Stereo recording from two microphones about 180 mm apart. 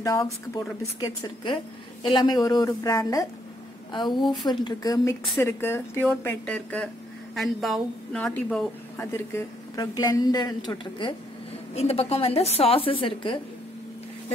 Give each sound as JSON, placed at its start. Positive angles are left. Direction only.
{"t": 0.0, "sound": "speech", "side_deg": 20}
{"t": 4.2, "sound": "speech", "side_deg": 0}
{"t": 4.5, "sound": "a woman's voice", "side_deg": 20}
{"t": 11.7, "sound": "a woman's voice", "side_deg": 35}